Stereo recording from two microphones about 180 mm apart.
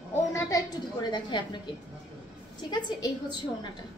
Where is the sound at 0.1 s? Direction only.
15° left (ahead or behind).